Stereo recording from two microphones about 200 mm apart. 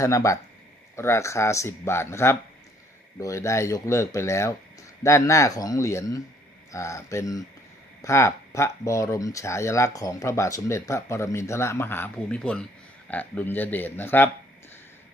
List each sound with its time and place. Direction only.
0.0 s speech: 15° left (ahead or behind)